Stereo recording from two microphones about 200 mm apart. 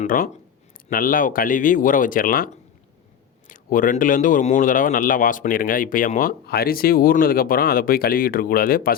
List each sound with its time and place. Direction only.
0.0 s speech: 45° left (ahead or behind)
3.5 s speech: 40° left (ahead or behind)